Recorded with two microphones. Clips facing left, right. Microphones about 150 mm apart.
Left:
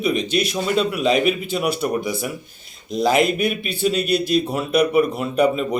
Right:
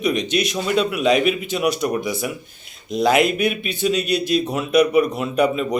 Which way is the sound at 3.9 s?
50° left (ahead or behind).